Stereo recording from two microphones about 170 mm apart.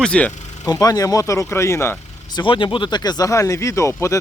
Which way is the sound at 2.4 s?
30° left (ahead or behind).